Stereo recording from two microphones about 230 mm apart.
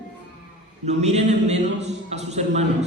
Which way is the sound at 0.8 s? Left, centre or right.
Right.